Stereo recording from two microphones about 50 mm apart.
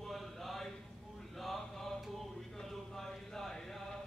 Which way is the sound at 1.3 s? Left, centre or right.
Centre.